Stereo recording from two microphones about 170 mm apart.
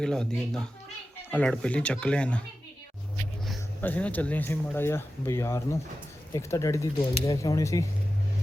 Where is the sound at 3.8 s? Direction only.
10° left (ahead or behind).